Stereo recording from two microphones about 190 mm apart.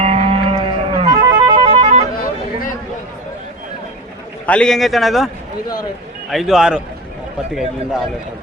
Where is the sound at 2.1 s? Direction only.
45° left (ahead or behind).